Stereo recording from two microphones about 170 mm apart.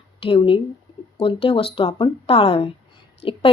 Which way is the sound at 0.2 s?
30° left (ahead or behind).